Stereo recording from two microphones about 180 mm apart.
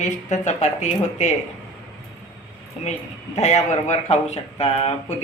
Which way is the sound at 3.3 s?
40° left (ahead or behind).